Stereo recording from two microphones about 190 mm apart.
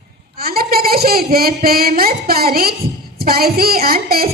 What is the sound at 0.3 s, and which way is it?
A woman's voice, 50° right (ahead or behind).